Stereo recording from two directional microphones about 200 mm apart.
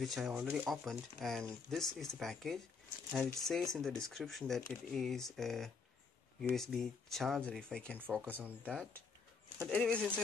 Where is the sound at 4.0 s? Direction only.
Centre (ahead or behind).